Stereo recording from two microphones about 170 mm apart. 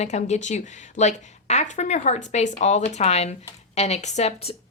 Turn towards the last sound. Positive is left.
turn(degrees=40)  # may be behind; listen again after turning